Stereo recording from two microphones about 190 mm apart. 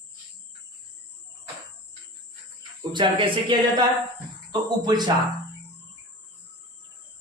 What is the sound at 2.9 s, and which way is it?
Speech, 25° right (ahead or behind).